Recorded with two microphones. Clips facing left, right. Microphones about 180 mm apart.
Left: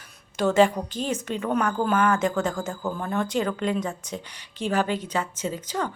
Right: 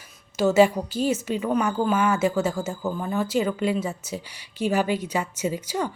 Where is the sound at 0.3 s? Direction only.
5° right (ahead or behind).